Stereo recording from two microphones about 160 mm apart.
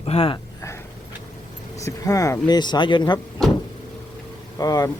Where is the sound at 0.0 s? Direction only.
35° left (ahead or behind).